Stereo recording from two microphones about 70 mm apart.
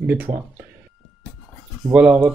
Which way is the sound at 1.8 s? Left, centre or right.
Centre.